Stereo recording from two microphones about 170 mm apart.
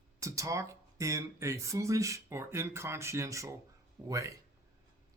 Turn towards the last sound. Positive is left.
turn(degrees=-20)  # may be behind; listen again after turning